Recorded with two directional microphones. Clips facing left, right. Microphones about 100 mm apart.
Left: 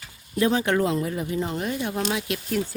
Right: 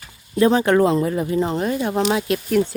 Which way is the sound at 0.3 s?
40° right (ahead or behind).